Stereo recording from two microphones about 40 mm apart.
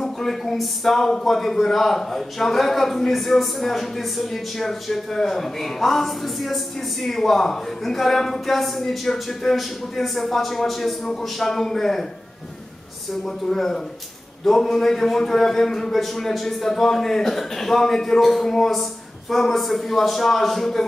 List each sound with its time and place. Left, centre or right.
0.0 s a man's voice: centre
13.1 s a man's voice: centre